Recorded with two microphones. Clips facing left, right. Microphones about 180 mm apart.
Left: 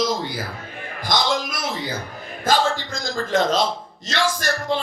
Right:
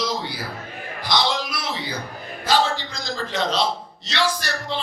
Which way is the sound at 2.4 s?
50° left (ahead or behind).